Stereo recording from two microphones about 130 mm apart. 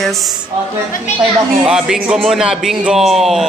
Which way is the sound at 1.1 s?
60° left (ahead or behind).